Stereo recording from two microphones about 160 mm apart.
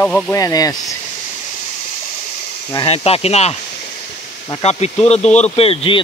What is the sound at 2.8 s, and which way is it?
Speech, 40° left (ahead or behind).